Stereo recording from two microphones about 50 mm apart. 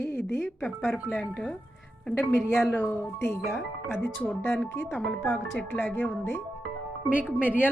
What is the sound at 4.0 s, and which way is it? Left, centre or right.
Speech, centre.